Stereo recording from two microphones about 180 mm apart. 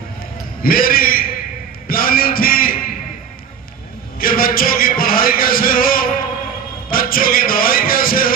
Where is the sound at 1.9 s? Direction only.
55° left (ahead or behind).